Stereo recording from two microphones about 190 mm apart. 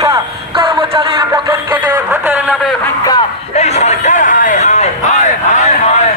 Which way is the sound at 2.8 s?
20° left (ahead or behind).